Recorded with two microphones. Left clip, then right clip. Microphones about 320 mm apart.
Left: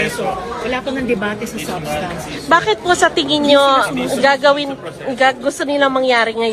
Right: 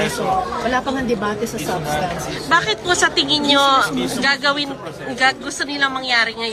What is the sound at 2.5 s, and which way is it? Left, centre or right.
Speech, centre.